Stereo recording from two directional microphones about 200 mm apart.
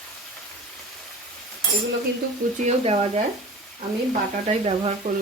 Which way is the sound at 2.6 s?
30° right (ahead or behind).